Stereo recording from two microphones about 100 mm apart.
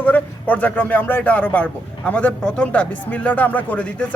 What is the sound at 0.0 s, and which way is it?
Speech, 15° left (ahead or behind).